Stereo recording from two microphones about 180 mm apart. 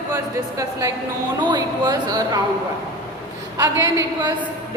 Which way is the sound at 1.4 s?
25° right (ahead or behind).